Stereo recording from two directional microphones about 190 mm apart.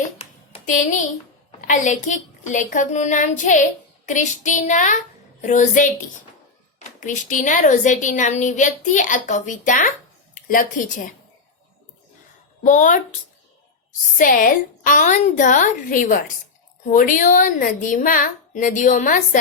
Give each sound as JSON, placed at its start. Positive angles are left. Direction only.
{"t": 0.0, "sound": "a sound", "side_deg": 35}
{"t": 1.6, "sound": "a woman's voice", "side_deg": 40}
{"t": 12.6, "sound": "a woman's voice", "side_deg": 40}
{"t": 14.2, "sound": "a woman's voice", "side_deg": 45}